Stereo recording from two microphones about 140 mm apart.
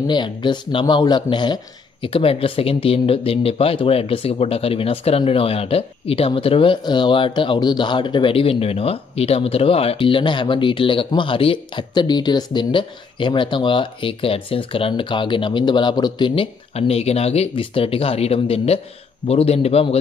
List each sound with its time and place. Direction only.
0.0 s a man's voice: 35° left (ahead or behind)